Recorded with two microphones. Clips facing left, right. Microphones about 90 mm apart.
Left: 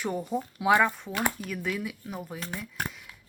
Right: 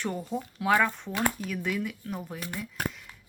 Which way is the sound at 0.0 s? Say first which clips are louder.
Left 2 dB; 10° left (ahead or behind).